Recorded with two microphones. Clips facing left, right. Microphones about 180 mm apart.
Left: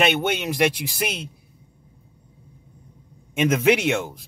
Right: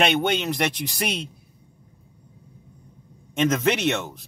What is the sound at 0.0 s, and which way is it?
A man's voice, 5° left (ahead or behind).